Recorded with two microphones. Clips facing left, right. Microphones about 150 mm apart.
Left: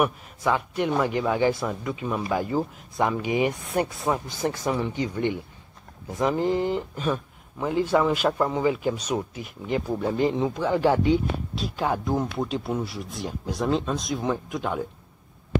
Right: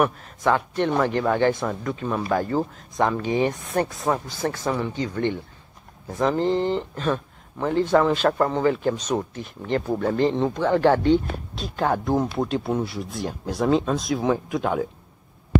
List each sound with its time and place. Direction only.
0.0 s speech: 5° left (ahead or behind)